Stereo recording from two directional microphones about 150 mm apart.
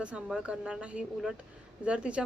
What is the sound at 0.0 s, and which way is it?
A woman's voice, 5° right (ahead or behind).